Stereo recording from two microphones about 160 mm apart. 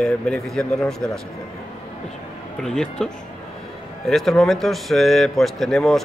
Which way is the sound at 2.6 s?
5° left (ahead or behind).